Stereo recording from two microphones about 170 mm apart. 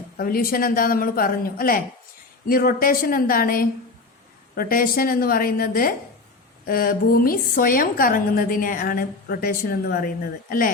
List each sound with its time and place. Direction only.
0.2 s a woman's voice: 60° left (ahead or behind)